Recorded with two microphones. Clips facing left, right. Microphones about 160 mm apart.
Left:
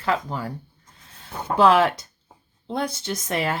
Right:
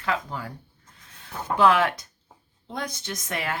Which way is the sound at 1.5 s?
30° left (ahead or behind).